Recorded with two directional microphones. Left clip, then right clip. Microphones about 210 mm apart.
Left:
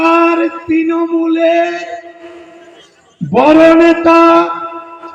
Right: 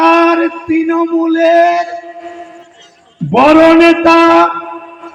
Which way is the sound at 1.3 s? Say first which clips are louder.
Right 4 dB; 60° right (ahead or behind).